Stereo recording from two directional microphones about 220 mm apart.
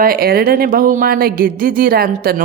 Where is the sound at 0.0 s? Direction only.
40° right (ahead or behind).